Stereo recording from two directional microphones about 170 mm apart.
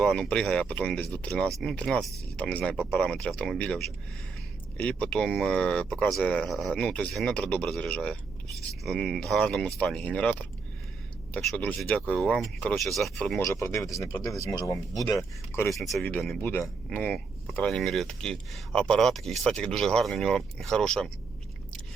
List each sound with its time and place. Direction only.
0.0 s speech: 5° left (ahead or behind)
11.3 s speech: 10° left (ahead or behind)
13.4 s speech: 15° left (ahead or behind)
15.7 s speech: centre (ahead or behind)